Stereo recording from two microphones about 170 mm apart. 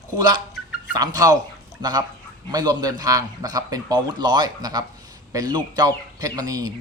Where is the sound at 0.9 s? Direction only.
20° right (ahead or behind).